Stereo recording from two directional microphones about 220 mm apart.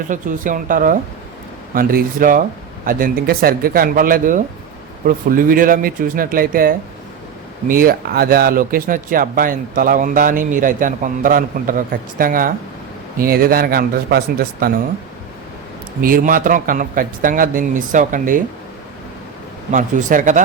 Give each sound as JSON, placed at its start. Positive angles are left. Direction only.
{"t": 0.1, "sound": "a man's voice", "side_deg": -35}
{"t": 16.0, "sound": "speech", "side_deg": -40}
{"t": 19.7, "sound": "speech", "side_deg": -35}